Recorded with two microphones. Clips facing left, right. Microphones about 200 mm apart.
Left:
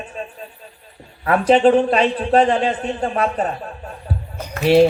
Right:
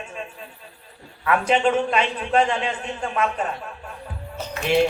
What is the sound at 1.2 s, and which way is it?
A man's voice, 35° left (ahead or behind).